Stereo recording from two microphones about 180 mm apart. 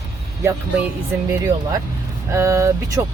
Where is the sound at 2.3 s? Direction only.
15° right (ahead or behind).